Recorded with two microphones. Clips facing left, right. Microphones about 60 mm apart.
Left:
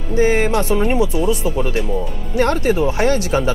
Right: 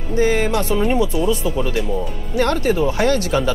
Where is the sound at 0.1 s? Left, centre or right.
Left.